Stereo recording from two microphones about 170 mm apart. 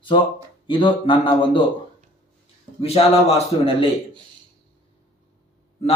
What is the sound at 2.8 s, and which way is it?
Speech, 35° left (ahead or behind).